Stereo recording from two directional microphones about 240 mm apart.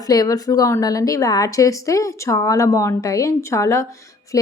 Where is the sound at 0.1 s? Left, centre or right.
Centre.